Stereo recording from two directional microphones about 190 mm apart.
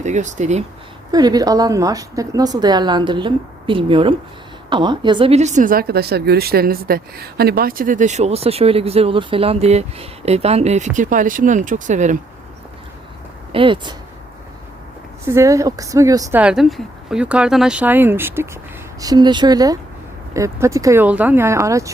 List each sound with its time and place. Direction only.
0.0 s a woman's voice: 40° right (ahead or behind)
1.1 s a woman's voice: 20° right (ahead or behind); by 12.1 s 40° right (ahead or behind)
13.5 s speech: 25° right (ahead or behind)
15.2 s speech: 15° right (ahead or behind)
16.4 s speech: 5° right (ahead or behind)